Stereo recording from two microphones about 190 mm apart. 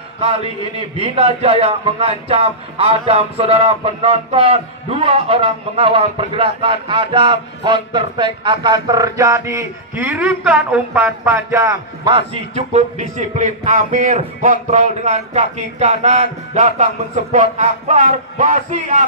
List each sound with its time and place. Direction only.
0.2 s a man's voice: 30° right (ahead or behind)